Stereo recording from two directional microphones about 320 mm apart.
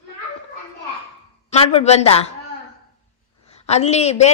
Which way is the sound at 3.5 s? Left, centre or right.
Centre.